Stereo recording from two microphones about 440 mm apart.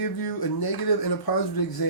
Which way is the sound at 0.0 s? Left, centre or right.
Left.